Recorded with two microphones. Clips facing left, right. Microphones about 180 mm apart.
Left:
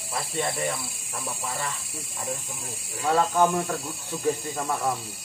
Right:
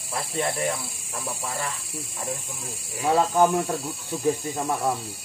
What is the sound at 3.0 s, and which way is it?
Speech, 15° right (ahead or behind).